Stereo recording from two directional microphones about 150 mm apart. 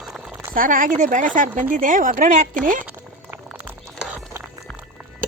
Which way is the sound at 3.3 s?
10° right (ahead or behind).